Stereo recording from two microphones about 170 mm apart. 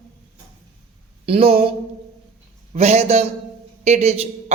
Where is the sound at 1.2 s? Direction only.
35° right (ahead or behind).